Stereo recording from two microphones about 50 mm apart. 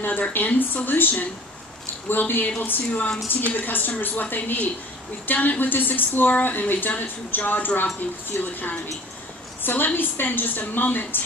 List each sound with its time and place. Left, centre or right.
0.0 s speech: left
9.6 s a sound: left
9.9 s speech: left